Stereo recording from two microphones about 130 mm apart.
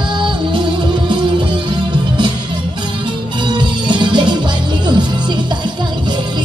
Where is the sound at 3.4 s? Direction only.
35° right (ahead or behind).